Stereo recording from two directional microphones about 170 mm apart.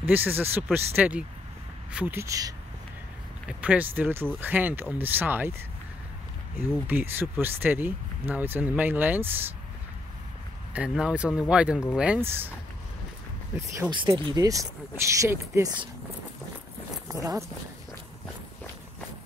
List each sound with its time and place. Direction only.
0.0 s speech: 10° right (ahead or behind)
3.4 s speech: 10° right (ahead or behind)
6.9 s speech: 10° right (ahead or behind)
10.7 s speech: 5° right (ahead or behind)
13.6 s speech: 20° right (ahead or behind)
17.1 s speech: 20° right (ahead or behind)